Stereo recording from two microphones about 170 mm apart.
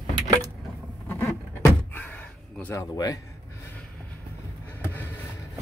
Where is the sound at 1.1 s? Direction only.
20° left (ahead or behind).